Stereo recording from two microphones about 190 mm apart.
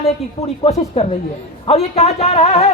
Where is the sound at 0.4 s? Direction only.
30° left (ahead or behind).